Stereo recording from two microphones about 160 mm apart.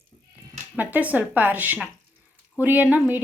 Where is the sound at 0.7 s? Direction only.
10° right (ahead or behind).